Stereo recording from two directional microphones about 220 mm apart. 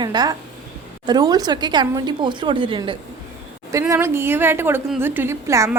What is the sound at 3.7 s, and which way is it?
A woman's voice, 10° right (ahead or behind).